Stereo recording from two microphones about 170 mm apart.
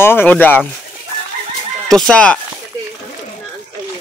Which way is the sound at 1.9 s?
5° left (ahead or behind).